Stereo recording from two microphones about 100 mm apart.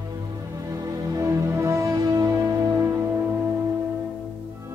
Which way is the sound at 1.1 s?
30° right (ahead or behind).